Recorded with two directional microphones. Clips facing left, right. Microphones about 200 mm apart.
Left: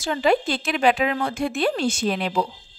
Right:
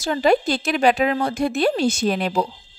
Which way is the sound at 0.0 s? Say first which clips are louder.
Right 2 dB; 40° right (ahead or behind).